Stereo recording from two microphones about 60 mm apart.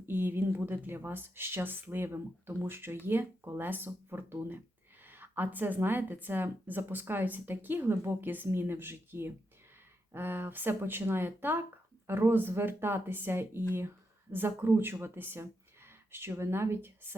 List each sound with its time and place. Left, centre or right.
0.1 s speech: right
15.0 s a sound: right
16.4 s speech: right